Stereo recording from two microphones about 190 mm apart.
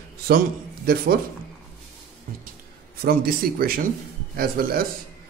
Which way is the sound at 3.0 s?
50° right (ahead or behind).